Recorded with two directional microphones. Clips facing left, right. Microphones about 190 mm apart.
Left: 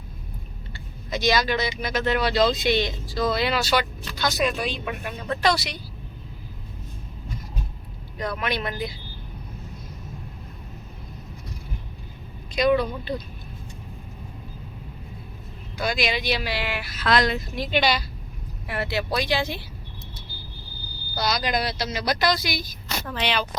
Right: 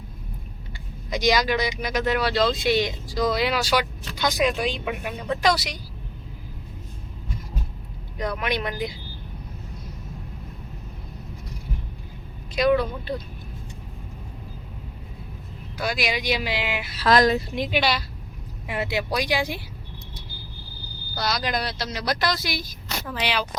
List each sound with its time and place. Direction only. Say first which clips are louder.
0.7 s a sound: right 1 dB; 15° right (ahead or behind)
1.8 s speech: even; 10° right (ahead or behind)
8.4 s speech: right 1 dB; 15° right (ahead or behind)
12.5 s speech: even; centre (ahead or behind)
15.8 s speech: left 1 dB; 10° right (ahead or behind)
17.0 s speech: right 4 dB; 40° right (ahead or behind)
17.7 s speech: left 2 dB; centre (ahead or behind)
18.7 s speech: even; 15° right (ahead or behind)
21.2 s speech: left 1 dB; centre (ahead or behind)